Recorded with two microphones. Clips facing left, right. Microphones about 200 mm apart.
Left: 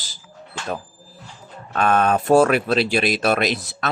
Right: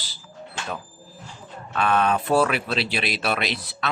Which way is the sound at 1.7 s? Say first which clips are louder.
Left 3 dB; 45° left (ahead or behind).